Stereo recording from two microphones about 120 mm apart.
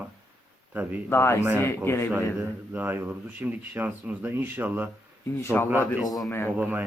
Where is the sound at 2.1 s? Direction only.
15° right (ahead or behind).